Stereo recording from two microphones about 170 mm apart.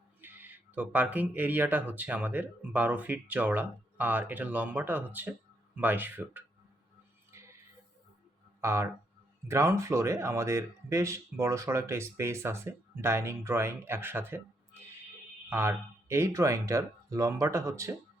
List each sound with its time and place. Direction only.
0.2 s speech: 10° right (ahead or behind)
8.6 s speech: 15° right (ahead or behind)